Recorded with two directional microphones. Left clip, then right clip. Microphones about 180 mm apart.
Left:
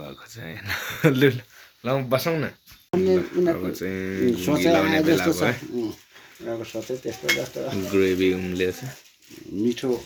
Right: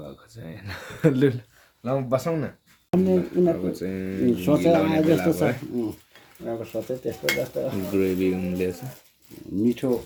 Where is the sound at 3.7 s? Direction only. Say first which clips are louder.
Left 2 dB; 10° left (ahead or behind).